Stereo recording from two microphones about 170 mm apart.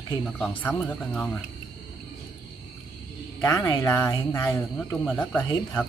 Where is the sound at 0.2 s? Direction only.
5° left (ahead or behind).